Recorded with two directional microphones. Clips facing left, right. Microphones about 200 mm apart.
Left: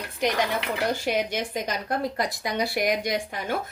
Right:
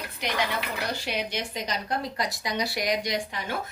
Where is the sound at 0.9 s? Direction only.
50° left (ahead or behind).